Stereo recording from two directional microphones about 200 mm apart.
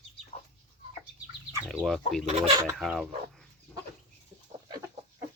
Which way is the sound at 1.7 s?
Centre (ahead or behind).